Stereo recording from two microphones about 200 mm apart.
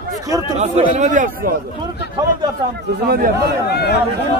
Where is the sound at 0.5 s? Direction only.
35° right (ahead or behind).